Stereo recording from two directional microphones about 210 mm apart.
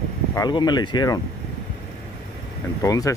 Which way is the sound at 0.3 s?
20° left (ahead or behind).